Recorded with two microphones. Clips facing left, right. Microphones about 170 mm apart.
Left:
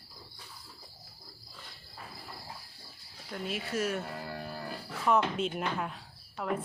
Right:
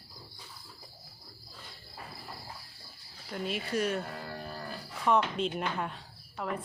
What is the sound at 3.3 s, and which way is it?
A woman's voice, centre (ahead or behind).